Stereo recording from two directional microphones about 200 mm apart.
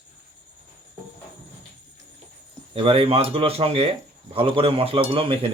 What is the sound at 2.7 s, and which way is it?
Speech, 25° right (ahead or behind).